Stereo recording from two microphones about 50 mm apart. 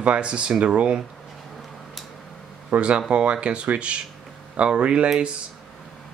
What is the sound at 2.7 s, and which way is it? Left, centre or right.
Speech, right.